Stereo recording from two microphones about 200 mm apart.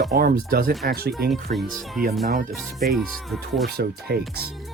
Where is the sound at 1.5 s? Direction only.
40° right (ahead or behind).